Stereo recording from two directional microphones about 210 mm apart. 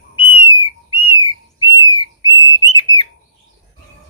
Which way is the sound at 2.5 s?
20° left (ahead or behind).